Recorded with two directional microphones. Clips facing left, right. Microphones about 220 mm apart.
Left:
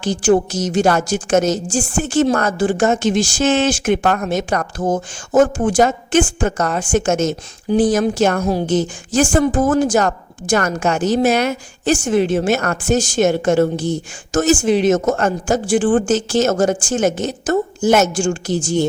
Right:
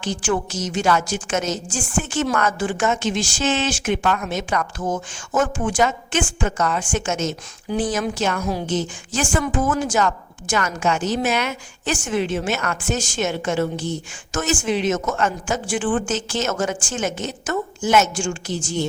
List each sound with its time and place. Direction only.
0.0 s a woman's voice: 40° left (ahead or behind)